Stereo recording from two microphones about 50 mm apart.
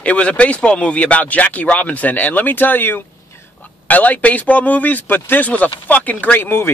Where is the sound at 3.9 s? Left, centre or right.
Left.